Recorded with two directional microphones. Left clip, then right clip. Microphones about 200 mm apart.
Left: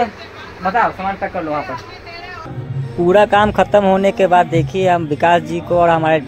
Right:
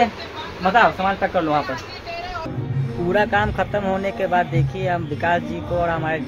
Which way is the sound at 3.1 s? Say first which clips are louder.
Left 8 dB; 40° left (ahead or behind).